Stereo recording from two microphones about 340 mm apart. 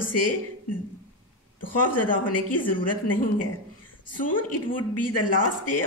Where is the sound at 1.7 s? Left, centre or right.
Left.